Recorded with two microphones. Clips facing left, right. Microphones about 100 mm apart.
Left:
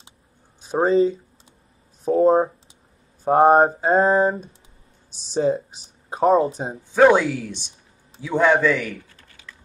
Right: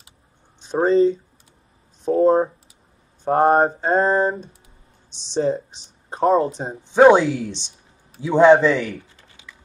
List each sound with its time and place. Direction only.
0.6 s speech: 5° left (ahead or behind)
2.0 s mantra: centre (ahead or behind)
5.3 s speech: 5° left (ahead or behind)
6.8 s speech: 25° right (ahead or behind)